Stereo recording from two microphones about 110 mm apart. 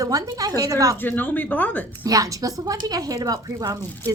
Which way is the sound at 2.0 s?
35° right (ahead or behind).